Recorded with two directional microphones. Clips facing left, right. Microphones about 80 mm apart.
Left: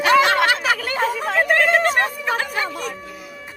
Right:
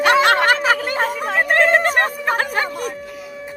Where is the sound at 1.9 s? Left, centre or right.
Right.